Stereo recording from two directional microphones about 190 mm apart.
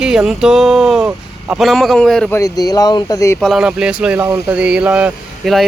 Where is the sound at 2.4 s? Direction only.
20° left (ahead or behind).